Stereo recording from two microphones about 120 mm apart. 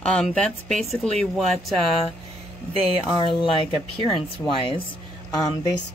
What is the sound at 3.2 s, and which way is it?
Speech, 45° left (ahead or behind).